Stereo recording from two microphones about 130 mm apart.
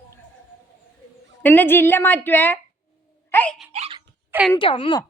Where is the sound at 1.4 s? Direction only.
15° left (ahead or behind).